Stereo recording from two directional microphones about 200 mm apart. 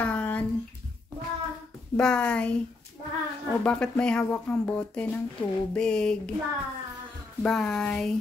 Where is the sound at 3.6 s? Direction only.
5° left (ahead or behind).